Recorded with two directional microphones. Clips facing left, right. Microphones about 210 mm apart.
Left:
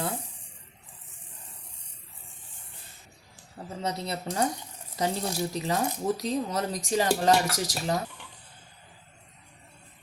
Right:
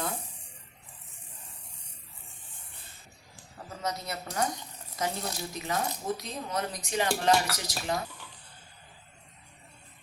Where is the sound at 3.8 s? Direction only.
30° left (ahead or behind).